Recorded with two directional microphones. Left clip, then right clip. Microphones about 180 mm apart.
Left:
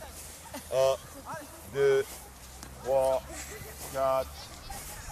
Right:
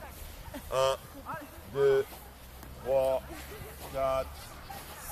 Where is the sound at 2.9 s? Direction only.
10° right (ahead or behind).